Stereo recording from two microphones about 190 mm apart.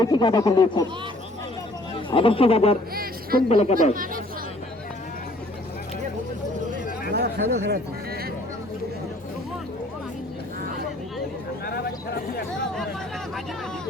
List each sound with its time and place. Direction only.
0.0 s speech: 20° left (ahead or behind)
2.0 s speech: 30° left (ahead or behind)
2.9 s a woman's voice: 50° right (ahead or behind)
3.5 s speech: 35° left (ahead or behind)
3.9 s speech: 45° right (ahead or behind)
7.1 s speech: 60° right (ahead or behind)
11.6 s a sound: 55° left (ahead or behind)